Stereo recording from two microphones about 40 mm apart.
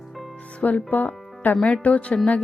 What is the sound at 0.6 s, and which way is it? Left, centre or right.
A woman's voice, left.